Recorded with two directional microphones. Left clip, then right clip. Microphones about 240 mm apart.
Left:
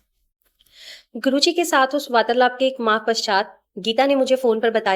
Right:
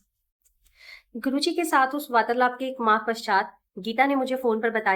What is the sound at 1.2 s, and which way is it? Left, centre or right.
A woman's voice, left.